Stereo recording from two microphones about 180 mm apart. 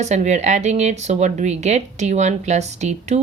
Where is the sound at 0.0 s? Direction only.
40° right (ahead or behind).